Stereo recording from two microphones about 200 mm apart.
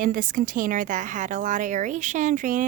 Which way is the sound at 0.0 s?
40° right (ahead or behind).